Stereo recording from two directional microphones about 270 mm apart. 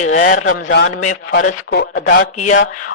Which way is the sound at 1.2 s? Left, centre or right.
Left.